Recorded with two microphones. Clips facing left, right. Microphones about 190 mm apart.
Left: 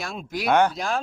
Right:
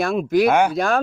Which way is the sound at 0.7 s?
60° right (ahead or behind).